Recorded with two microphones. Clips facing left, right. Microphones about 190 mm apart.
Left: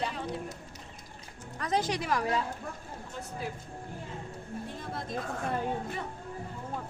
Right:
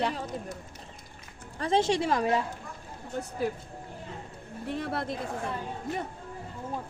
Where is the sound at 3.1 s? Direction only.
50° right (ahead or behind).